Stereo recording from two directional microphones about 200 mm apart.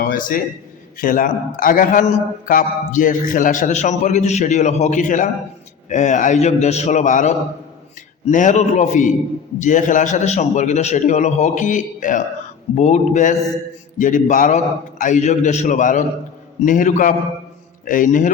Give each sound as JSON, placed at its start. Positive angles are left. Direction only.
{"t": 0.0, "sound": "a man's voice", "side_deg": 45}